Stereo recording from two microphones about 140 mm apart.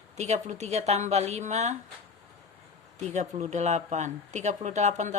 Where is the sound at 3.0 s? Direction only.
55° right (ahead or behind).